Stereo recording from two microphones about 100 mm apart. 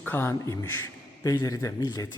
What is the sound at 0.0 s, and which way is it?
Speech, 20° left (ahead or behind).